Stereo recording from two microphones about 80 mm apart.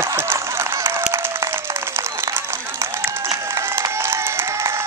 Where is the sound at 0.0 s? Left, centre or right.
Right.